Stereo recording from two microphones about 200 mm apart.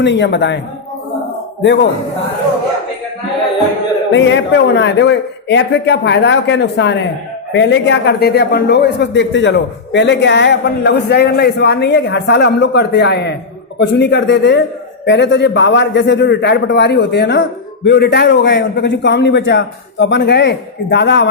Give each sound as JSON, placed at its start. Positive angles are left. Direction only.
{"t": 0.0, "sound": "a man's voice", "side_deg": 60}
{"t": 4.1, "sound": "a man's voice", "side_deg": 60}